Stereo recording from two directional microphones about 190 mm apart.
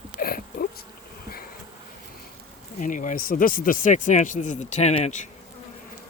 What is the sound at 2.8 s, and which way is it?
Speech, 45° left (ahead or behind).